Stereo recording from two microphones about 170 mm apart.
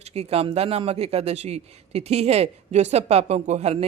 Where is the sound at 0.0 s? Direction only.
40° right (ahead or behind).